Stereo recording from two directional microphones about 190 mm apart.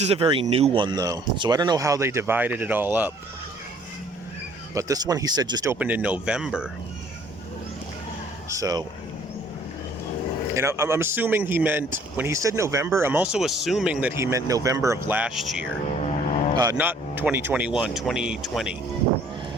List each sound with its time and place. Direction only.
0.0 s speech: 30° right (ahead or behind); by 3.1 s 10° right (ahead or behind)
4.7 s speech: 15° right (ahead or behind)
5.8 s speech: 10° right (ahead or behind)
8.4 s speech: 20° right (ahead or behind)
10.5 s speech: 15° right (ahead or behind)
16.7 s speech: 10° right (ahead or behind)